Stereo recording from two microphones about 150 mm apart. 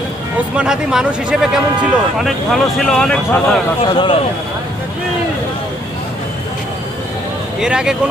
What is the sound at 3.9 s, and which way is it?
Speech, 35° left (ahead or behind).